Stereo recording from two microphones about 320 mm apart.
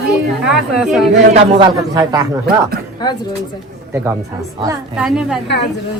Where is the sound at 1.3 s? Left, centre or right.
Centre.